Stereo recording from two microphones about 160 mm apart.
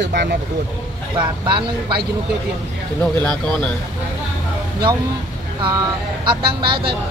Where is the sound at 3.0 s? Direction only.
5° left (ahead or behind).